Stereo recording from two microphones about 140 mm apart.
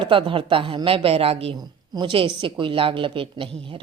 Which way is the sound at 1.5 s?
30° right (ahead or behind).